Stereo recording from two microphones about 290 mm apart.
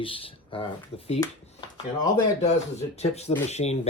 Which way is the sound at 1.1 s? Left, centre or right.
Centre.